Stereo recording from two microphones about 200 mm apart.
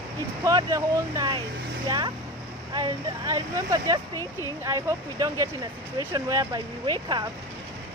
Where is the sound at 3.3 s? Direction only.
20° right (ahead or behind).